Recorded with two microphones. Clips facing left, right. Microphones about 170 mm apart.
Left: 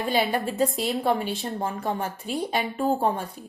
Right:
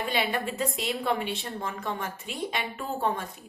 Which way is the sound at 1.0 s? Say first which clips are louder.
Left 4 dB; 45° left (ahead or behind).